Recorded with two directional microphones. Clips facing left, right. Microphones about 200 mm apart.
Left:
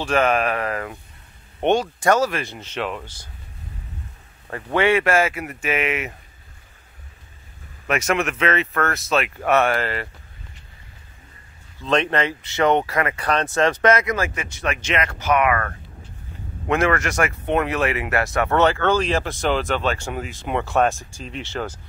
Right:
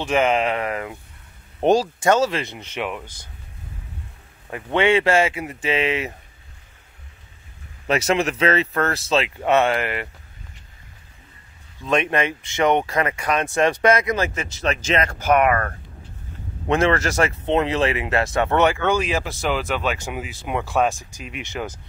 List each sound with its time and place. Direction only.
0.0 s speech: 20° right (ahead or behind)
1.6 s speech: 35° right (ahead or behind); by 3.3 s 15° right (ahead or behind)
4.7 s speech: 25° right (ahead or behind)
7.8 s speech: 30° right (ahead or behind)
11.8 s speech: 10° right (ahead or behind); by 14.8 s 25° right (ahead or behind)
14.9 s speech: 40° right (ahead or behind)
16.6 s speech: 25° right (ahead or behind)